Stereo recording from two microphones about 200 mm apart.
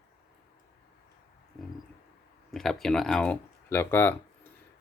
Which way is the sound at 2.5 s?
Centre (ahead or behind).